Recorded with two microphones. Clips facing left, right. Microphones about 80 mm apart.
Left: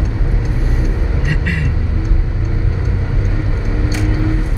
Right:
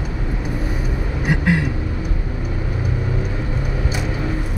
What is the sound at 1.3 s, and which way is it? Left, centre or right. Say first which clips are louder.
Vehicle: right 5 dB; centre.